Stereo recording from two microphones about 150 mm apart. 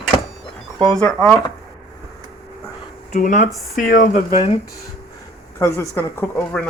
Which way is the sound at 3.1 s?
55° left (ahead or behind).